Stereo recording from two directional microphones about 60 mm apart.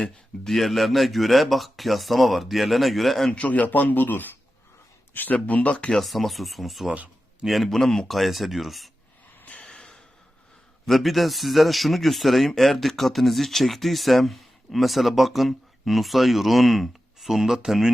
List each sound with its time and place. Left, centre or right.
0.4 s speech: centre
3.3 s speech: left
5.9 s speech: centre
9.4 s snort: left
9.6 s snort: centre
10.8 s speech: centre